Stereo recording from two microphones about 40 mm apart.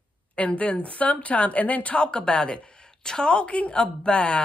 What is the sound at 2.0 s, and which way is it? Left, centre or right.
A woman's voice, left.